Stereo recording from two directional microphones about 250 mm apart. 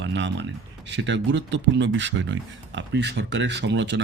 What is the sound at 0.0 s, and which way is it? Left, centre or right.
Speech, right.